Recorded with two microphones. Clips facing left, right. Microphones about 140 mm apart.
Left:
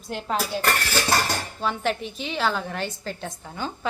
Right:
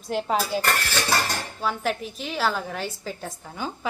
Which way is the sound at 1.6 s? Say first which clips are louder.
Left 1 dB; 5° right (ahead or behind).